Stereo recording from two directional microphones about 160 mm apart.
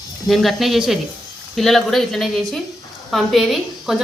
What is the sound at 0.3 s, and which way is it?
A woman's voice, centre (ahead or behind).